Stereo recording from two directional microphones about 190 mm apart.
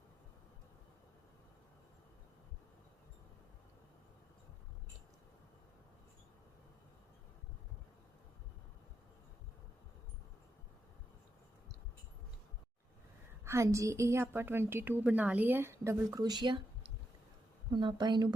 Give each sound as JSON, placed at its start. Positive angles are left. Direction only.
{"t": 13.4, "sound": "a woman's voice", "side_deg": -15}